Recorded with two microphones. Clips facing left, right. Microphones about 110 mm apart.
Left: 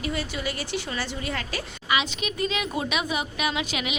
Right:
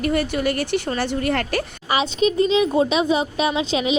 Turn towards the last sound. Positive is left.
turn(degrees=-30)  # may be behind; listen again after turning